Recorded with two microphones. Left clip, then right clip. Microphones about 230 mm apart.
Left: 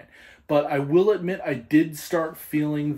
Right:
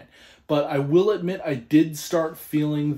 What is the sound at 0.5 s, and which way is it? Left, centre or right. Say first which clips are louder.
Speech: even; centre.